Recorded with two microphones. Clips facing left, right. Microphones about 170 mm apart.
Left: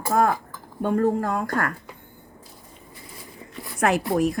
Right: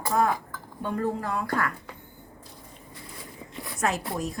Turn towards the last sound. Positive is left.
turn(degrees=65)  # may be behind; listen again after turning